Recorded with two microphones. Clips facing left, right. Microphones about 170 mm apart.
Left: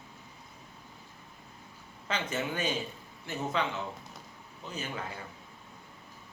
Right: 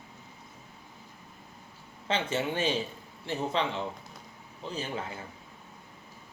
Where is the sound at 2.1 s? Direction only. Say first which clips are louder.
Right 4 dB; 30° right (ahead or behind).